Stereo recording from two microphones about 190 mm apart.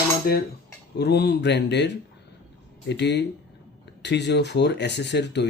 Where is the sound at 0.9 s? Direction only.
60° left (ahead or behind).